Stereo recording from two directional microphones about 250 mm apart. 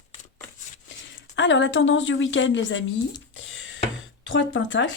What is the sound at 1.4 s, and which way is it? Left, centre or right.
Speech, left.